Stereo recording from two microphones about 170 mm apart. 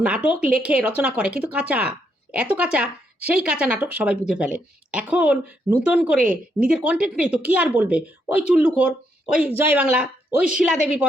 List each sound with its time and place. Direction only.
0.0 s speech: 5° right (ahead or behind)